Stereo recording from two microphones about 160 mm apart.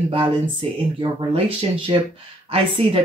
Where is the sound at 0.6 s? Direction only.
35° right (ahead or behind).